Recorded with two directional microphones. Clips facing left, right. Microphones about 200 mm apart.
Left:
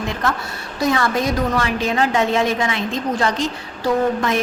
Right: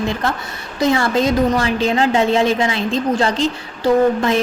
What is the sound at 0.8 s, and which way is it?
A woman's voice, 25° right (ahead or behind).